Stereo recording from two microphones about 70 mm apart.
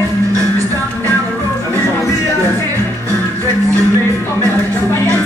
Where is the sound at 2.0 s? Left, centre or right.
Left.